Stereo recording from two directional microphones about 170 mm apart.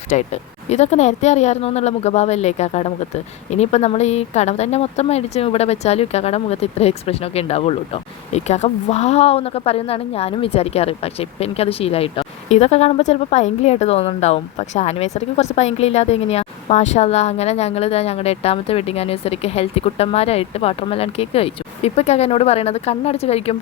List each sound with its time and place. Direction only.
0.1 s a woman's voice: 45° left (ahead or behind)